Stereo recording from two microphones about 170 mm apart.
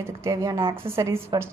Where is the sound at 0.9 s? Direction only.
15° right (ahead or behind).